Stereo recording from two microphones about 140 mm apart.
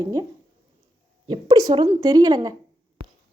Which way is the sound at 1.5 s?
25° right (ahead or behind).